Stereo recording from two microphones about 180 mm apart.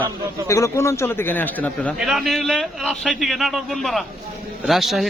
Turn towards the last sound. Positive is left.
turn(degrees=0)  # may be behind; listen again after turning